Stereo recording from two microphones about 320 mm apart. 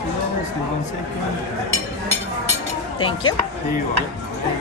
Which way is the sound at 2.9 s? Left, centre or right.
Centre.